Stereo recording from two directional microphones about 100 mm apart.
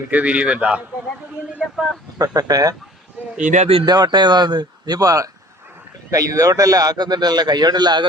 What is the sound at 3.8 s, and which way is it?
A man's voice, 45° right (ahead or behind).